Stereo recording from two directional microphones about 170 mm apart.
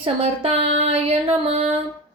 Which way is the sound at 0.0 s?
35° right (ahead or behind).